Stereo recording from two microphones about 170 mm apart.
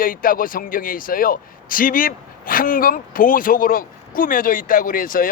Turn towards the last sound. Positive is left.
turn(degrees=55)  # may be behind; listen again after turning